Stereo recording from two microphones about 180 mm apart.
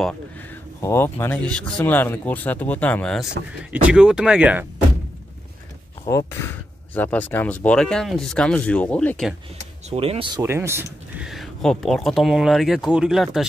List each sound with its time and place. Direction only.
0.7 s speech: 15° left (ahead or behind)
3.7 s speech: 5° right (ahead or behind)
6.0 s speech: 15° left (ahead or behind)
9.8 s speech: 30° right (ahead or behind)
10.4 s speech: 15° right (ahead or behind)
11.2 s speech: centre (ahead or behind)